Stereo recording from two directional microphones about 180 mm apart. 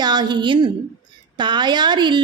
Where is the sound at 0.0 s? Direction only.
25° right (ahead or behind).